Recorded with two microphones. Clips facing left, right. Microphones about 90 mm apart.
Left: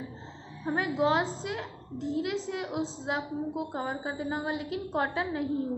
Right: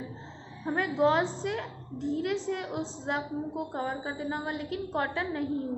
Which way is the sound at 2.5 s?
15° left (ahead or behind).